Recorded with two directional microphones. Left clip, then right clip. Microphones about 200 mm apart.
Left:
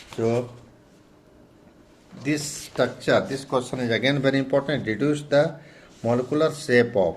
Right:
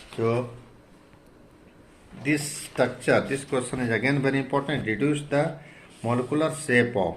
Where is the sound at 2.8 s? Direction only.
30° left (ahead or behind).